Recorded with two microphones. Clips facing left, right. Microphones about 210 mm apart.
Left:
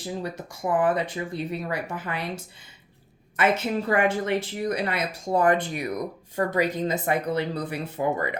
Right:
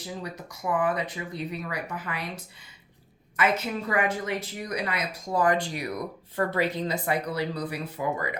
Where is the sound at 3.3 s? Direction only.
25° left (ahead or behind).